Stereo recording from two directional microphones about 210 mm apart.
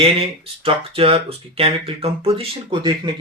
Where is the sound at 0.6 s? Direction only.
25° right (ahead or behind).